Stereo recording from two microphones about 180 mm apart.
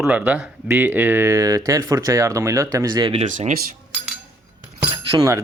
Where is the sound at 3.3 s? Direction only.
45° right (ahead or behind).